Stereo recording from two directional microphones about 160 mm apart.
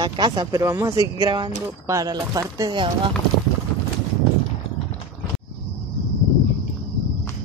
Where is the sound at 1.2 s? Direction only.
30° right (ahead or behind).